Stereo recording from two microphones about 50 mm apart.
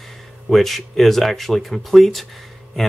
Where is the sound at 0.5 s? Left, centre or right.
Centre.